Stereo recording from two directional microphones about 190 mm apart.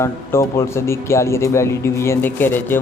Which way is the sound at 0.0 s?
15° left (ahead or behind).